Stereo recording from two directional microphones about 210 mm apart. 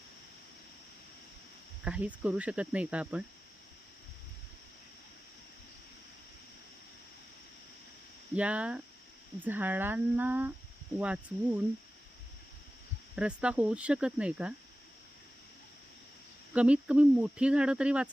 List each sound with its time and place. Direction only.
1.8 s speech: 5° right (ahead or behind)
8.4 s speech: 5° right (ahead or behind)
13.1 s speech: 5° right (ahead or behind)
16.5 s speech: 5° right (ahead or behind)